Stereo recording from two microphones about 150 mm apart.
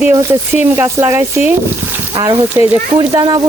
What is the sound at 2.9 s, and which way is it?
Speech, 30° right (ahead or behind).